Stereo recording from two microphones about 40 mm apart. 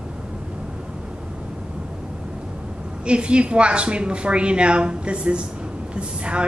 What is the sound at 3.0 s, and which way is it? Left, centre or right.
A woman's voice, right.